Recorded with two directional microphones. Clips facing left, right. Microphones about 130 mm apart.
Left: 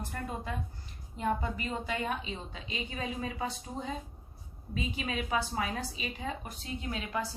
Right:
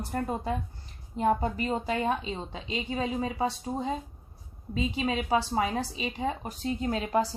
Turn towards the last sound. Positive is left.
turn(degrees=-35)  # may be behind; listen again after turning